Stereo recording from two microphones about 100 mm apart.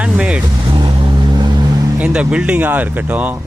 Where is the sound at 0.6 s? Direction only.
55° right (ahead or behind).